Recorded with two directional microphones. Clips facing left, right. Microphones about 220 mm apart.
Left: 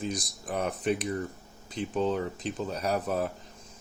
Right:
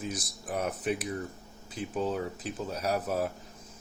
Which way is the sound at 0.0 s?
5° right (ahead or behind).